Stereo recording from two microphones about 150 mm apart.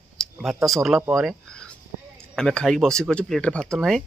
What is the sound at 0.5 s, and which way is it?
Speech, 20° right (ahead or behind).